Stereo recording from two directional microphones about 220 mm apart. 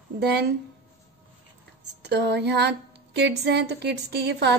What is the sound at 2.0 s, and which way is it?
Speech, 50° right (ahead or behind).